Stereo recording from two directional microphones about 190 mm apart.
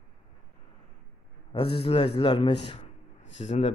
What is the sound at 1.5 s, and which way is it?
A man's voice, 30° left (ahead or behind).